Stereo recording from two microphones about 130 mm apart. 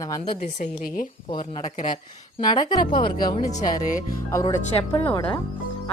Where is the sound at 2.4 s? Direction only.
35° left (ahead or behind).